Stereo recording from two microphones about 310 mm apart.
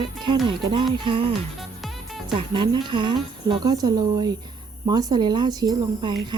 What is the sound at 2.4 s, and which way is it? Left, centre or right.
Speech, centre.